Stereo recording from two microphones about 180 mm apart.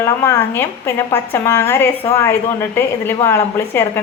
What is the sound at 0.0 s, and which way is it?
A woman's voice, 15° left (ahead or behind).